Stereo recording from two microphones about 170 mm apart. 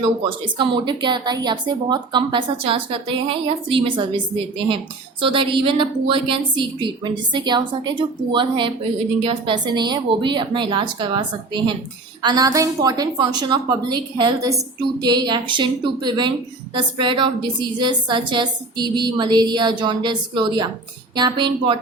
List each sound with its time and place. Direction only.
0.3 s speech: 30° right (ahead or behind)